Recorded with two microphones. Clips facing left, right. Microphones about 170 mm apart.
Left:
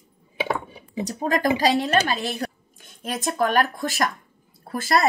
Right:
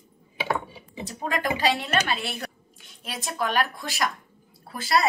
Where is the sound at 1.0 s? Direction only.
40° left (ahead or behind).